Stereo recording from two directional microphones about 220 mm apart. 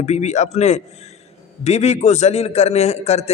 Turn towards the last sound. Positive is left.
turn(degrees=30)  # may be behind; listen again after turning